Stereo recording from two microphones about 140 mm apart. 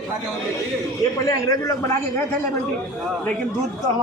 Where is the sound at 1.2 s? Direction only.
25° left (ahead or behind).